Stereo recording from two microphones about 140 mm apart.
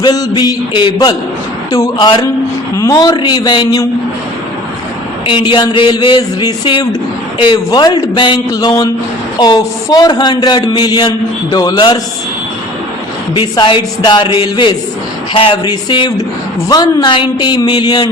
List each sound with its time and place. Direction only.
0.0 s a man's voice: 30° left (ahead or behind)
5.2 s a man's voice: 35° left (ahead or behind)
13.3 s a man's voice: 35° left (ahead or behind)